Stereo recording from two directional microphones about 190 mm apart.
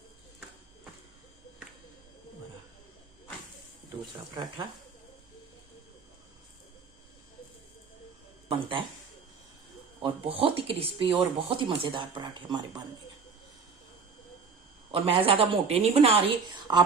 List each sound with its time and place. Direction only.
8.4 s a woman's voice: 30° right (ahead or behind)
10.0 s a woman's voice: 30° right (ahead or behind)
14.9 s a woman's voice: 30° right (ahead or behind)